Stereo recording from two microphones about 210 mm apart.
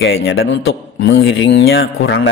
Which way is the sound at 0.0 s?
60° left (ahead or behind).